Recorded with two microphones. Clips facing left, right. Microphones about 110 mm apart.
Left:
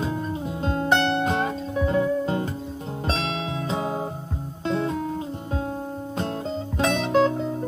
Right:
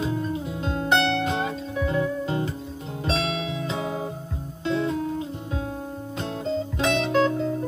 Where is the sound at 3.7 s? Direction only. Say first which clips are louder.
Left 2 dB; 40° left (ahead or behind).